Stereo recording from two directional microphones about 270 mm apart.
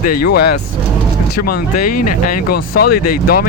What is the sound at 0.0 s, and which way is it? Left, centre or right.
Speech, left.